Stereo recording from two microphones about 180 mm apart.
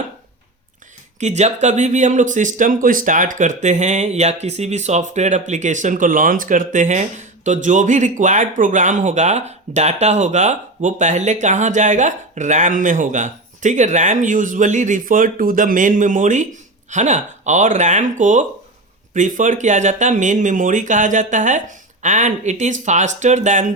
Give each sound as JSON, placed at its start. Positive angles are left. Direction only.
{"t": 1.2, "sound": "speech", "side_deg": -40}